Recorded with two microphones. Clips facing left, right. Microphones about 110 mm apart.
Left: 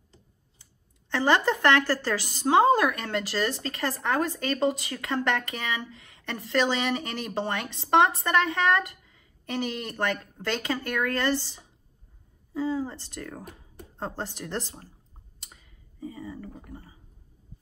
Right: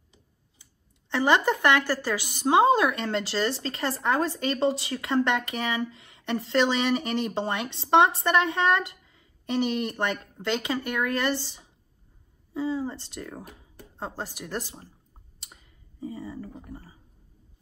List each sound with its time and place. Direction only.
1.1 s a woman's voice: 15° right (ahead or behind)
13.9 s speech: 5° right (ahead or behind)
15.5 s a sound: 30° right (ahead or behind)